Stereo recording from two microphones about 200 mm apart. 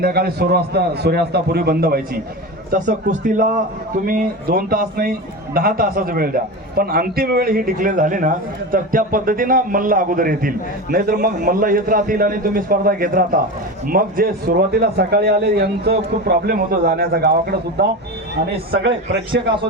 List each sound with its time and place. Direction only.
0.0 s a man's voice: 50° right (ahead or behind)
3.1 s a man's voice: 40° right (ahead or behind); by 18.9 s 65° right (ahead or behind)